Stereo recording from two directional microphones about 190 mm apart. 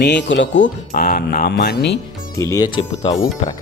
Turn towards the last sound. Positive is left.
turn(degrees=25)  # may be behind; listen again after turning